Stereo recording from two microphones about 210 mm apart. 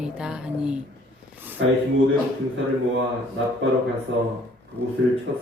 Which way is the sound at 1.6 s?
60° right (ahead or behind).